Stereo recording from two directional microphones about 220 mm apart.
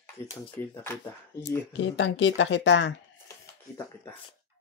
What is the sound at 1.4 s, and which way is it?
Speech, 55° left (ahead or behind).